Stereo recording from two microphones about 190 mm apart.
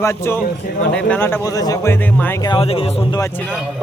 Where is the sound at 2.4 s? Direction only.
25° left (ahead or behind).